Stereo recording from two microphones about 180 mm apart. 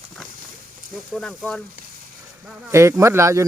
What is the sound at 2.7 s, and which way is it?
Speech, 15° right (ahead or behind).